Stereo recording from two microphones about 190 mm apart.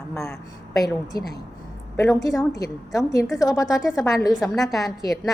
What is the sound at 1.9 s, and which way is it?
A woman's voice, 15° left (ahead or behind).